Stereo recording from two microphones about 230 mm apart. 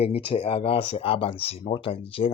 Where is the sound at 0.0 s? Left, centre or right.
Left.